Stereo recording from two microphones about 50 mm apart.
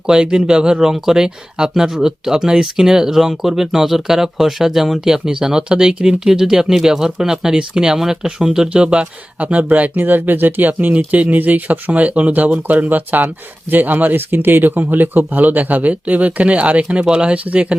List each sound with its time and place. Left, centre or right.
0.1 s speech: centre